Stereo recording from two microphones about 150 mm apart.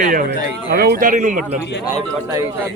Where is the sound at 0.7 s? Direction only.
90° right; by 1.4 s 60° right (ahead or behind).